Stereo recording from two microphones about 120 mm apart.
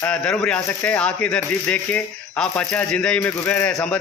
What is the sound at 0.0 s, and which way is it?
Speech, 5° left (ahead or behind).